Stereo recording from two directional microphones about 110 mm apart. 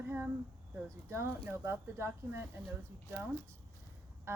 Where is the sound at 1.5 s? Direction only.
25° right (ahead or behind).